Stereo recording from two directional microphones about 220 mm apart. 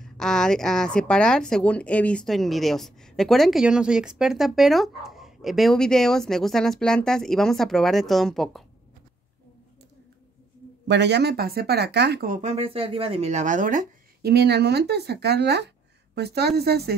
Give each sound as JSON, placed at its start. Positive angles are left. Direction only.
{"t": 0.0, "sound": "speech", "side_deg": 0}
{"t": 10.9, "sound": "speech", "side_deg": -50}